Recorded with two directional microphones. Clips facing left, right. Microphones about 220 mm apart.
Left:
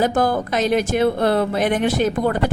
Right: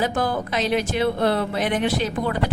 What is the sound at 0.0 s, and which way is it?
Speech, 45° left (ahead or behind).